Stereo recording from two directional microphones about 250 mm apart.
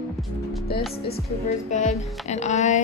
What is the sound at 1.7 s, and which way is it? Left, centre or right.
Music, left.